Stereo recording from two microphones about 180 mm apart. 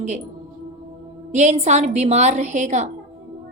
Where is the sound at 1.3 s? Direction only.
40° right (ahead or behind).